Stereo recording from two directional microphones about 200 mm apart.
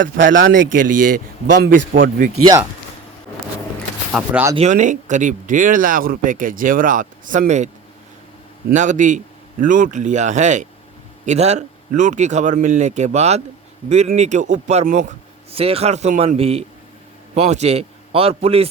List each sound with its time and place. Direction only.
0.2 s speech: 40° right (ahead or behind)
4.1 s speech: 10° right (ahead or behind)
4.5 s speech: 35° right (ahead or behind)
8.7 s speech: 40° right (ahead or behind)